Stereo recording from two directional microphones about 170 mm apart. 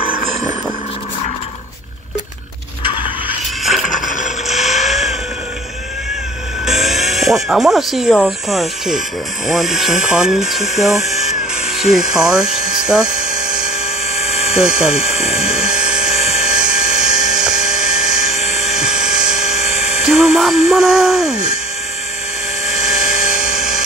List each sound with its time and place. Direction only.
3.6 s a sound: centre (ahead or behind)
4.5 s vehicle: centre (ahead or behind)
6.6 s a sound: centre (ahead or behind)
8.1 s speech: 5° left (ahead or behind)
12.8 s hum: 5° right (ahead or behind)
14.1 s a sound: 35° left (ahead or behind)
14.5 s speech: 5° right (ahead or behind)
15.3 s helicopter: 5° right (ahead or behind)
16.3 s dental drill: 5° right (ahead or behind)
18.3 s helicopter: 40° left (ahead or behind)
18.7 s helicopter: 5° right (ahead or behind)
19.6 s electric toothbrush: 40° left (ahead or behind)
20.0 s speech: centre (ahead or behind)
22.7 s helicopter: centre (ahead or behind)